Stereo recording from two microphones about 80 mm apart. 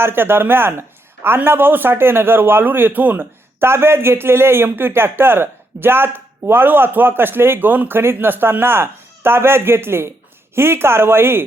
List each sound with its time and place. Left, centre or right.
0.0 s a man's voice: right